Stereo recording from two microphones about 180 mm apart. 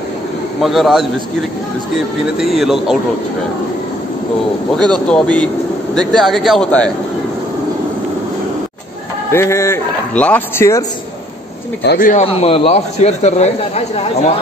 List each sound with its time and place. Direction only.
0.6 s a man's voice: centre (ahead or behind)
2.3 s a man's voice: centre (ahead or behind)
5.1 s a man's voice: 5° left (ahead or behind)
9.3 s a man's voice: 15° left (ahead or behind)
11.8 s speech: 70° left (ahead or behind)
12.1 s a man's voice: 35° left (ahead or behind)